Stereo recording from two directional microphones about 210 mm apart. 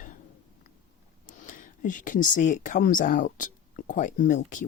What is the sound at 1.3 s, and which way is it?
Speech, 40° left (ahead or behind).